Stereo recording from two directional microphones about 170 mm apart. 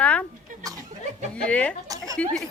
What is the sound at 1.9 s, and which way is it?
Speech, 20° right (ahead or behind).